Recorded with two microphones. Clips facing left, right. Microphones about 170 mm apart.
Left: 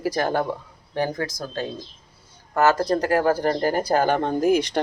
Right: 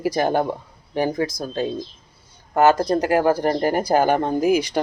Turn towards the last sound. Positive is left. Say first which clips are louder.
# right 1 dB
turn(degrees=-5)  # may be behind; listen again after turning